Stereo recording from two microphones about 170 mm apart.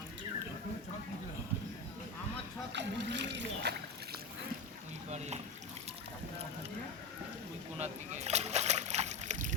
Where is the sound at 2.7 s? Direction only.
90° right.